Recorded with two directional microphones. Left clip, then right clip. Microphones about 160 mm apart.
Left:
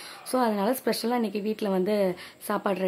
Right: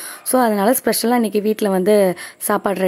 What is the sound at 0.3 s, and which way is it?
A woman's voice, 50° right (ahead or behind).